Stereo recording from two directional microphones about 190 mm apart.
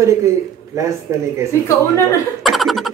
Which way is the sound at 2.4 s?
Centre (ahead or behind).